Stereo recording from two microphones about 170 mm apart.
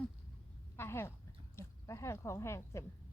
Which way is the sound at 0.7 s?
15° left (ahead or behind).